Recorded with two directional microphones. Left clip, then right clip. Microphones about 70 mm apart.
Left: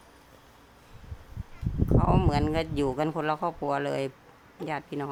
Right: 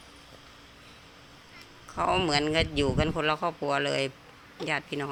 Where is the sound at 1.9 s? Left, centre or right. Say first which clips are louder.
Even; left.